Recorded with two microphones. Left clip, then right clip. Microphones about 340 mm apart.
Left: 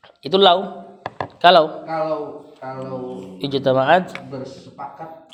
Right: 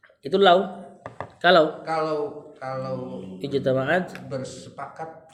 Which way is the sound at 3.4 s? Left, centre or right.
Centre.